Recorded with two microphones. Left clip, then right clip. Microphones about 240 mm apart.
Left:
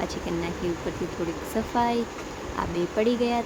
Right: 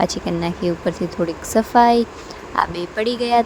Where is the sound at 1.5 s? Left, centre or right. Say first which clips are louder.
Right 12 dB; right.